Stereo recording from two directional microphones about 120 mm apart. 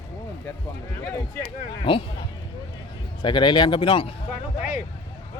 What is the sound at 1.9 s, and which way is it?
Speech, 45° left (ahead or behind).